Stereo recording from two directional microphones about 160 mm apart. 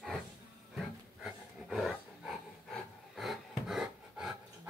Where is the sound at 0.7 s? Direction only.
Centre (ahead or behind).